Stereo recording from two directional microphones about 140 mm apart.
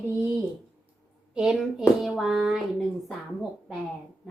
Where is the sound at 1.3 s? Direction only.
5° right (ahead or behind).